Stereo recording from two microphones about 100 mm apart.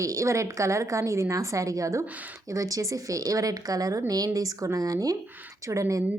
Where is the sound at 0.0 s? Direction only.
30° right (ahead or behind).